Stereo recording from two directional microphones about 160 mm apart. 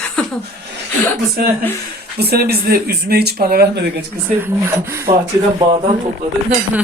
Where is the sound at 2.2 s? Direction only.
80° right.